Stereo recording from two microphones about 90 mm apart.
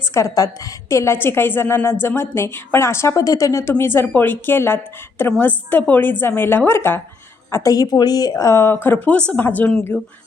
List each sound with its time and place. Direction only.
0.0 s a woman's voice: 35° left (ahead or behind)
7.5 s a woman's voice: 35° left (ahead or behind); by 9.8 s 15° left (ahead or behind)